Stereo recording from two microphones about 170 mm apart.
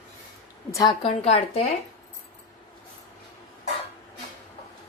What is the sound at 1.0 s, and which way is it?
Speech, 35° left (ahead or behind).